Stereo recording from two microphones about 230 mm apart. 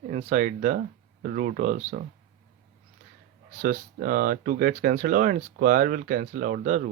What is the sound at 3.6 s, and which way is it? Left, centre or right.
Speech, right.